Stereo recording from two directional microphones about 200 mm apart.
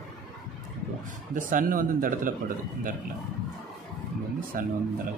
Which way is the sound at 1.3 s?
40° right (ahead or behind).